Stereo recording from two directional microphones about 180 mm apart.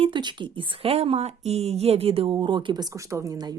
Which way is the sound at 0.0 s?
25° right (ahead or behind).